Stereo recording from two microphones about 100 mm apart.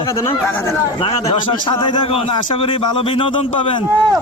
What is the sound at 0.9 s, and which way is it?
A man's voice, 70° left (ahead or behind).